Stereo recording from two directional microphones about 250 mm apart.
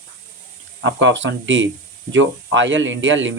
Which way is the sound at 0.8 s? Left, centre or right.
Right.